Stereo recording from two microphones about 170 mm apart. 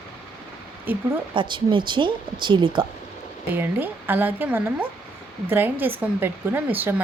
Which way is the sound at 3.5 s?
10° right (ahead or behind).